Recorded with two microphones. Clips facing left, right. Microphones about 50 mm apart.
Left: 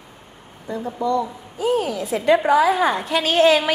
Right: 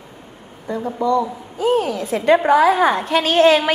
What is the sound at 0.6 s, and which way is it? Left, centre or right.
A woman's voice, right.